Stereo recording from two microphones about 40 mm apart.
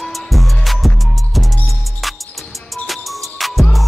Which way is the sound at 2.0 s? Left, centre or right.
Centre.